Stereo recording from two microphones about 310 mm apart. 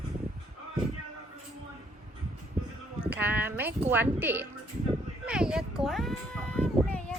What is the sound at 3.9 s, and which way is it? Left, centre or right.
Speech, centre.